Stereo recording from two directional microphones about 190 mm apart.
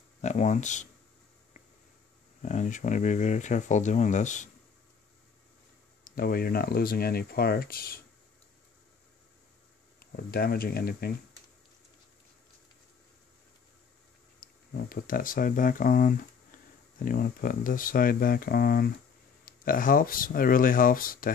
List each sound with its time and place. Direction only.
0.2 s speech: 40° left (ahead or behind)
2.4 s speech: 40° left (ahead or behind)
6.0 s speech: 50° left (ahead or behind)
9.9 s speech: 55° left (ahead or behind)
14.7 s speech: 50° left (ahead or behind)